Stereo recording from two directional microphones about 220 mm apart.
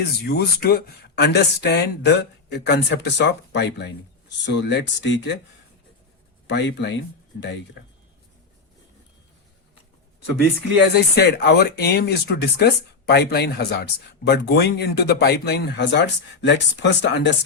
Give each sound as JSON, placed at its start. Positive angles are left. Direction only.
{"t": 0.3, "sound": "speech", "side_deg": 45}
{"t": 6.5, "sound": "speech", "side_deg": 50}
{"t": 10.8, "sound": "speech", "side_deg": 50}